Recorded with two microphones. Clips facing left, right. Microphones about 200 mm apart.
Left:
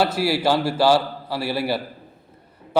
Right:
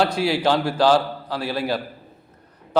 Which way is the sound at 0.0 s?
5° left (ahead or behind).